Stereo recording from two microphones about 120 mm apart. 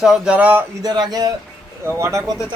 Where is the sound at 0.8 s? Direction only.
35° right (ahead or behind).